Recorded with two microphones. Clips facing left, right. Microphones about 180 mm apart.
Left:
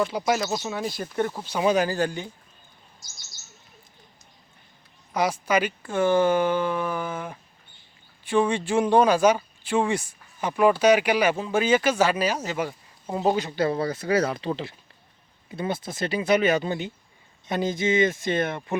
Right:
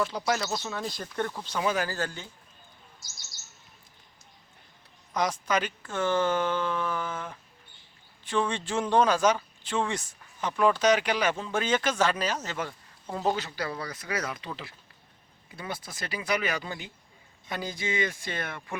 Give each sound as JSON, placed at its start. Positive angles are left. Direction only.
{"t": 0.1, "sound": "speech", "side_deg": 10}
{"t": 5.1, "sound": "speech", "side_deg": 10}